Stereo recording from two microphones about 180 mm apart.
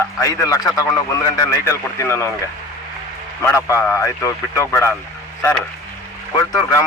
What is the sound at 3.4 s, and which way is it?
Speech, 15° left (ahead or behind).